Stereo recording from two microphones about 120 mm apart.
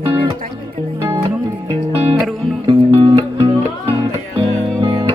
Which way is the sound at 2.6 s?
45° right (ahead or behind).